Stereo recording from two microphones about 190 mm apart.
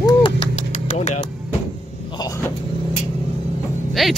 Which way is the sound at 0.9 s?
40° left (ahead or behind).